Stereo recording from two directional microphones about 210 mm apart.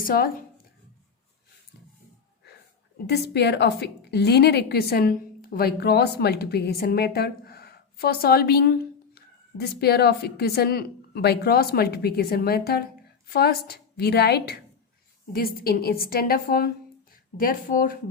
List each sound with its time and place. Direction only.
0.0 s speech: 45° left (ahead or behind)
3.1 s a woman's voice: 55° left (ahead or behind)